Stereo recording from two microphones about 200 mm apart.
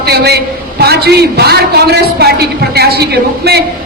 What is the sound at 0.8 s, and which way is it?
A man's voice, 55° right (ahead or behind).